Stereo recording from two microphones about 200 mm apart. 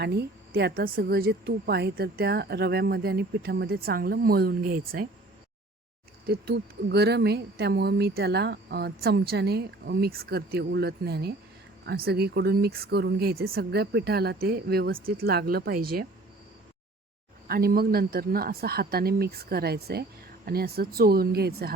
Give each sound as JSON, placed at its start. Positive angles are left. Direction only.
{"t": 0.0, "sound": "speech", "side_deg": -55}
{"t": 6.2, "sound": "speech", "side_deg": -55}
{"t": 17.5, "sound": "speech", "side_deg": -50}